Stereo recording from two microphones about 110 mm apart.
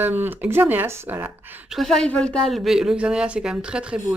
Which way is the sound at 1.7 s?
Centre (ahead or behind).